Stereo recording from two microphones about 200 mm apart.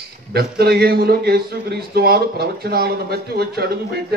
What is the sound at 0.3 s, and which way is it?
A man's voice, 50° right (ahead or behind).